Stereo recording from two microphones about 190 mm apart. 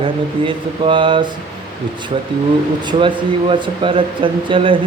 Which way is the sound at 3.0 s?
25° right (ahead or behind).